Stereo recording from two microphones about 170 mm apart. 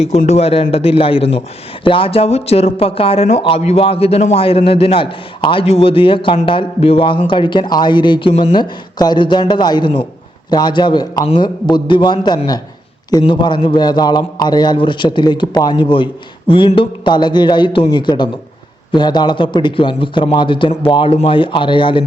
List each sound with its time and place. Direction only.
0.2 s a man's voice: 40° left (ahead or behind)